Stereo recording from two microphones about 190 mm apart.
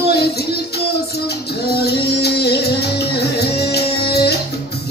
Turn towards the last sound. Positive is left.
turn(degrees=60)  # may be behind; listen again after turning